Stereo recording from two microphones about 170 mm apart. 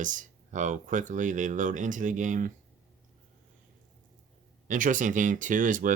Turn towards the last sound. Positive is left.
turn(degrees=-50)  # may be behind; listen again after turning